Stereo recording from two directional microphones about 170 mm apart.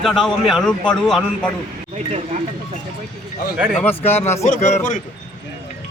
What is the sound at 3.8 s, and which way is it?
Speech, 10° left (ahead or behind).